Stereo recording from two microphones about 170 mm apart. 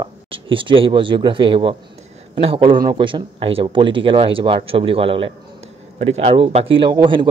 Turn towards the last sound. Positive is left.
turn(degrees=-30)  # may be behind; listen again after turning